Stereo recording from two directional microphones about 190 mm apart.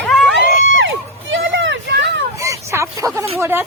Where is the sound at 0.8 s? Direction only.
75° right (ahead or behind).